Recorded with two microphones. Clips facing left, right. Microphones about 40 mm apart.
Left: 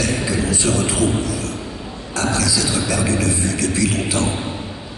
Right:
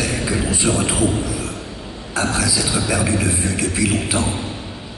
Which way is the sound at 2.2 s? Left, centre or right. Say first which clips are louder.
Even; centre.